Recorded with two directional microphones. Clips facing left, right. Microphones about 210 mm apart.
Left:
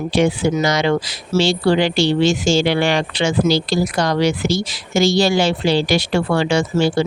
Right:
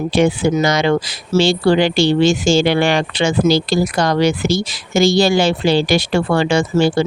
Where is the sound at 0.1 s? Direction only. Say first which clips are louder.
Right 1 dB; 50° right (ahead or behind).